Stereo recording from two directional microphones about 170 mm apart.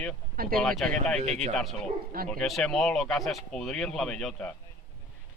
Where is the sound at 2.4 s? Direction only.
Centre (ahead or behind).